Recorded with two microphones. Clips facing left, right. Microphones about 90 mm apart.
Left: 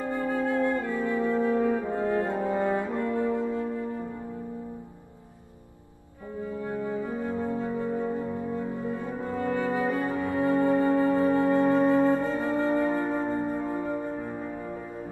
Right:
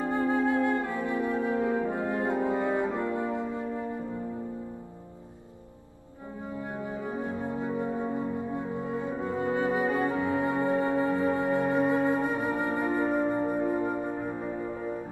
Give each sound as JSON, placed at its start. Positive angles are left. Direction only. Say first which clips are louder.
{"t": 0.0, "sound": "music", "louder": "right 2 dB", "side_deg": -20}
{"t": 6.6, "sound": "music", "louder": "left 4 dB", "side_deg": -20}
{"t": 8.5, "sound": "french horn", "louder": "left 1 dB", "side_deg": -20}
{"t": 12.1, "sound": "music", "louder": "left 2 dB", "side_deg": -15}